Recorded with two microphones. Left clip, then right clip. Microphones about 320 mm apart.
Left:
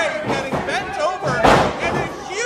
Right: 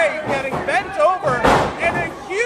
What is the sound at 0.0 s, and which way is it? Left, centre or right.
Music, right.